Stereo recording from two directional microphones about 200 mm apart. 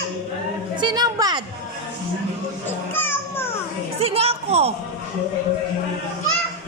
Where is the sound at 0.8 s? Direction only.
20° right (ahead or behind).